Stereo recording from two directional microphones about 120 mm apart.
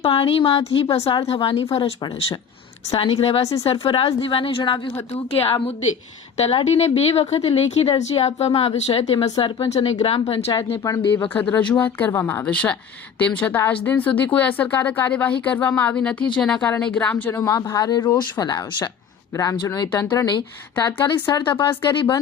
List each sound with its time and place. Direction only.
0.0 s speech: 50° left (ahead or behind)
2.9 s speech: 45° left (ahead or behind)
3.4 s a woman's voice: 30° left (ahead or behind)
3.7 s speech: 50° left (ahead or behind)
11.3 s a woman's voice: 15° left (ahead or behind); by 22.2 s 40° left (ahead or behind)